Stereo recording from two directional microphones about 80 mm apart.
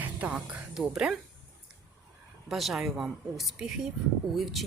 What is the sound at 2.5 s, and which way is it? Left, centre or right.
Speech, centre.